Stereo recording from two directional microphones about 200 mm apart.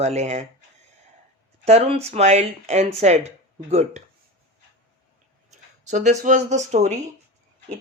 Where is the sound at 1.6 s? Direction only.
30° right (ahead or behind).